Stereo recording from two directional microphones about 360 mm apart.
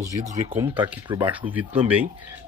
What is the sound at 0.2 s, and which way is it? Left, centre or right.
Speech, centre.